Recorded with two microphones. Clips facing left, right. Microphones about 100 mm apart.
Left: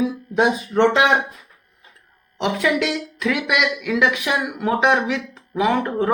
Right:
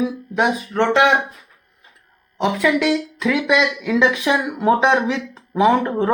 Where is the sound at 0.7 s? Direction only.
5° left (ahead or behind).